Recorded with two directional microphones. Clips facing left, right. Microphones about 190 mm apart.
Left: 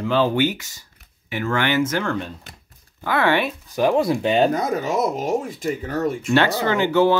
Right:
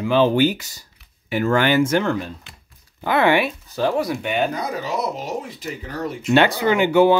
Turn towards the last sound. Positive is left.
turn(degrees=-15)  # may be behind; listen again after turning